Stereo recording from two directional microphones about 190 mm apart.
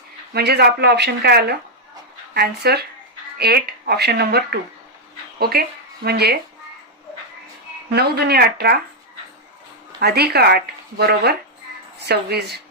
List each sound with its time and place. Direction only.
0.3 s speech: 60° right (ahead or behind)
7.9 s speech: 55° right (ahead or behind)
10.0 s speech: 55° right (ahead or behind)